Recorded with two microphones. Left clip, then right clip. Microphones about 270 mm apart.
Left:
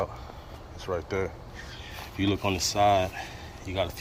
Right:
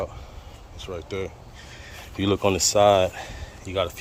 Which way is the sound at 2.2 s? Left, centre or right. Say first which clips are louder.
Right 6 dB; right.